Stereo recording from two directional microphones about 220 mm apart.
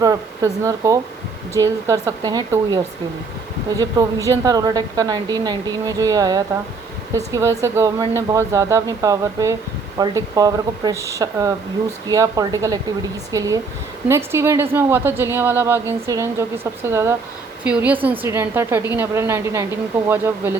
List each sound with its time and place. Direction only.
0.0 s a woman's voice: 15° right (ahead or behind)